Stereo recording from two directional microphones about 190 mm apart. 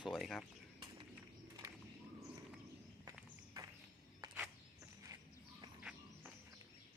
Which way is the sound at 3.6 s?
20° right (ahead or behind).